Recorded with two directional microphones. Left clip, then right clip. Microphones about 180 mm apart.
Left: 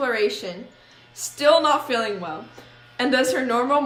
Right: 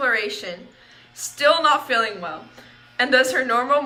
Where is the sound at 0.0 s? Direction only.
40° left (ahead or behind).